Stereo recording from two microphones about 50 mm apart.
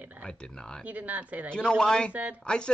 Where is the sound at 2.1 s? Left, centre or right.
Right.